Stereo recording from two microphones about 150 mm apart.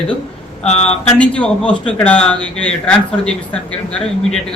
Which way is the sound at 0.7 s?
45° left (ahead or behind).